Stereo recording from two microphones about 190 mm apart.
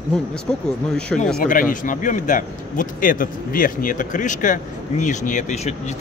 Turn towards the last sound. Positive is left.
turn(degrees=40)  # may be behind; listen again after turning